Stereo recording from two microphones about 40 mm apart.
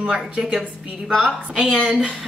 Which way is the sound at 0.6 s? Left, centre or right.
Centre.